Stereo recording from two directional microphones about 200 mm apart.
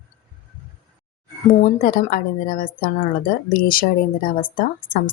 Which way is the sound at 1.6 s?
45° left (ahead or behind).